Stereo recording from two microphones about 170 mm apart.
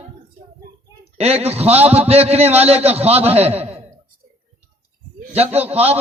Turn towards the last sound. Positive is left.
turn(degrees=-35)  # may be behind; listen again after turning